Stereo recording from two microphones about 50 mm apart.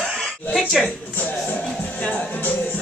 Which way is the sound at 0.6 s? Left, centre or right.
Centre.